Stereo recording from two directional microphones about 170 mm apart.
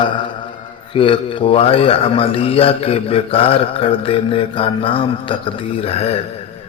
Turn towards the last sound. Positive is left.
turn(degrees=35)  # may be behind; listen again after turning